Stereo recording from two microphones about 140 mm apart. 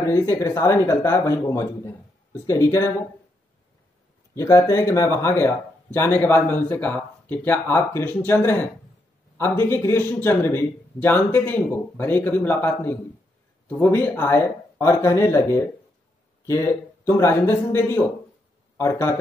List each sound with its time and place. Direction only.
0.0 s speech: 20° left (ahead or behind)
4.4 s speech: 20° left (ahead or behind)
17.0 s speech: 20° left (ahead or behind)